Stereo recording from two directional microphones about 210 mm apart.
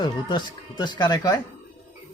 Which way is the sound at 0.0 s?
20° left (ahead or behind).